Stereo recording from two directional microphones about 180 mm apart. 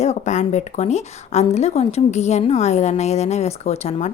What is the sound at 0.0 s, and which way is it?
A woman's voice, 40° left (ahead or behind).